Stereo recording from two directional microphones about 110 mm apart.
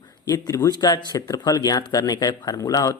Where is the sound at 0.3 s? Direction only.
35° left (ahead or behind).